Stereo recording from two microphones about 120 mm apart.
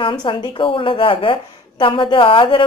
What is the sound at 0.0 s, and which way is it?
A woman's voice, 40° left (ahead or behind).